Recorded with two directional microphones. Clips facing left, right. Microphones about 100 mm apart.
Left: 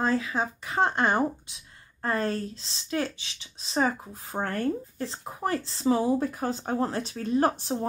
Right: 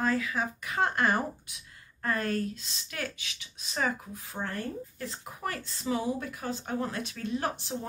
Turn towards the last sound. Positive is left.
turn(degrees=40)  # may be behind; listen again after turning